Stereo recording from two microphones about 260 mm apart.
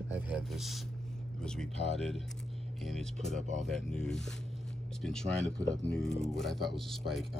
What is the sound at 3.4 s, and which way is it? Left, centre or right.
Speech, right.